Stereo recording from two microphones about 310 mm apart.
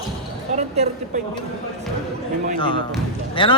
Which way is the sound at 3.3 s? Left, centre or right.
Centre.